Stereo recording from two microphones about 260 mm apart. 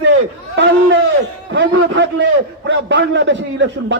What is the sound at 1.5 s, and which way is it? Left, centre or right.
A man's voice, right.